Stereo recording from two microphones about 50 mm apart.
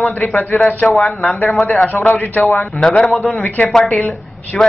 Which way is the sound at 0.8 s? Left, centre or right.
Centre.